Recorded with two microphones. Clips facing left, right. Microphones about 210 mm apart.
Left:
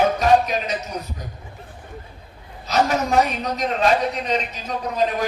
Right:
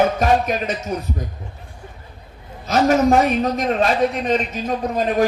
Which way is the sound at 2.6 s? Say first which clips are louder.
Right 5 dB; 50° right (ahead or behind).